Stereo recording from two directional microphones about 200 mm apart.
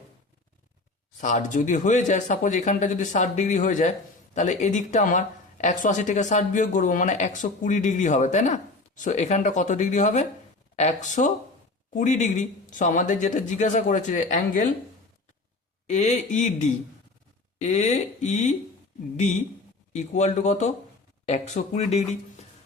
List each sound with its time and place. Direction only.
1.2 s speech: 40° left (ahead or behind)
15.9 s speech: 35° left (ahead or behind)
19.9 s speech: 35° left (ahead or behind)